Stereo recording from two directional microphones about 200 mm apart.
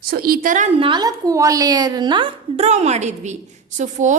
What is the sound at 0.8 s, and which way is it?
A woman's voice, 20° right (ahead or behind).